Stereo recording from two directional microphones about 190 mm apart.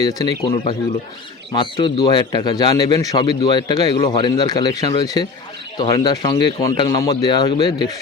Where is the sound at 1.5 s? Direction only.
25° left (ahead or behind).